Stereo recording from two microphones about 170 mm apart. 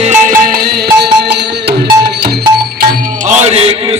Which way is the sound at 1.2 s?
80° right.